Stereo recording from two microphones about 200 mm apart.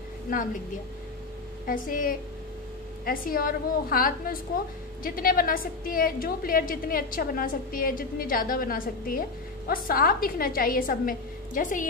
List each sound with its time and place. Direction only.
0.3 s a woman's voice: 45° left (ahead or behind)
1.7 s a woman's voice: 45° left (ahead or behind)